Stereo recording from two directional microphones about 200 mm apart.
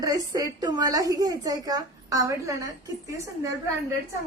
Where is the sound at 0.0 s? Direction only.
20° right (ahead or behind).